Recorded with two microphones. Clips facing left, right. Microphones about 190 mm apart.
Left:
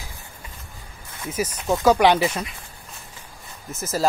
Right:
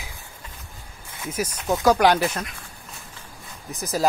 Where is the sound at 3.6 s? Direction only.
Centre (ahead or behind).